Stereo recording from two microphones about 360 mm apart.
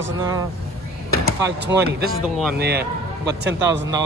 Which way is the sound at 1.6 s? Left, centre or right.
Right.